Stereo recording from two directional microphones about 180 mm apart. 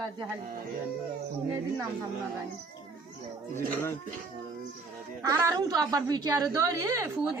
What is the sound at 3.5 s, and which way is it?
Speech, 15° left (ahead or behind).